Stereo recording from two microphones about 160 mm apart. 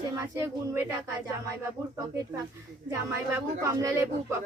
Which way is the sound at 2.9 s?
15° right (ahead or behind).